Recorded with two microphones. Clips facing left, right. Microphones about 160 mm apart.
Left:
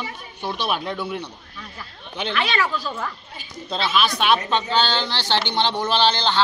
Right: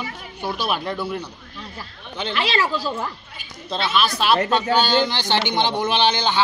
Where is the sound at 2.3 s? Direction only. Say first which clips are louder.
Right 1 dB; 30° right (ahead or behind).